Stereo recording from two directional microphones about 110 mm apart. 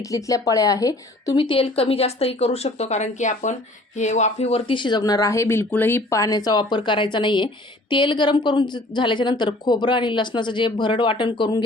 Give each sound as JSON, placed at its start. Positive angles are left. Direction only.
{"t": 0.1, "sound": "a woman's voice", "side_deg": 30}
{"t": 1.4, "sound": "speech", "side_deg": 50}
{"t": 4.7, "sound": "speech", "side_deg": 45}